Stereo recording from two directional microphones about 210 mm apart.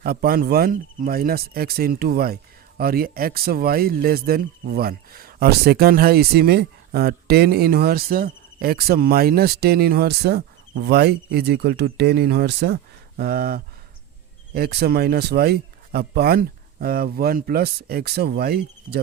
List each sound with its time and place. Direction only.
0.0 s speech: 45° right (ahead or behind)